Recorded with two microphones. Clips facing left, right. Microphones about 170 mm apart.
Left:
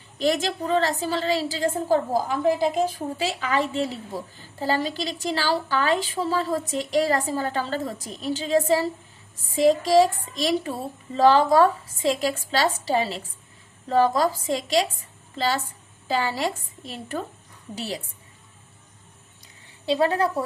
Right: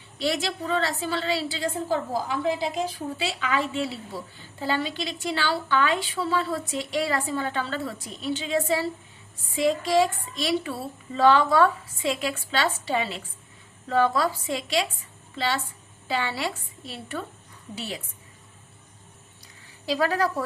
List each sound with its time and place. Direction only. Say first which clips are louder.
0.2 s a woman's voice: left 4 dB; 45° left (ahead or behind)
19.8 s a woman's voice: left 3 dB; 25° left (ahead or behind)